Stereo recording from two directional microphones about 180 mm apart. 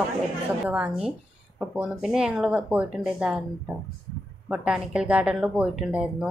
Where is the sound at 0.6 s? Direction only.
5° right (ahead or behind).